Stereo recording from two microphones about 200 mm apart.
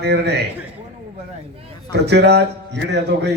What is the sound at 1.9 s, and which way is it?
A man's voice, 55° right (ahead or behind).